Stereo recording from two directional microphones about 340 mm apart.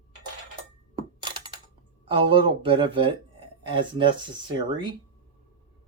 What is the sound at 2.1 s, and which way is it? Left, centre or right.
Speech, centre.